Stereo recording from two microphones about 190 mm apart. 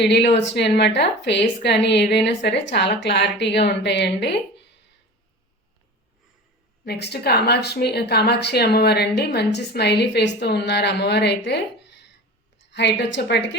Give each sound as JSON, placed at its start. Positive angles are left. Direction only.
{"t": 0.0, "sound": "a woman's voice", "side_deg": 65}
{"t": 6.8, "sound": "a woman's voice", "side_deg": 60}